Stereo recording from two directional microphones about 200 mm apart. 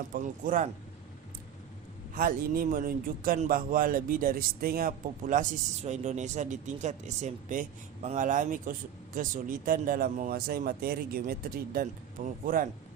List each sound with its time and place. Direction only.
0.1 s speech: 45° right (ahead or behind)
2.1 s a man's voice: 45° right (ahead or behind)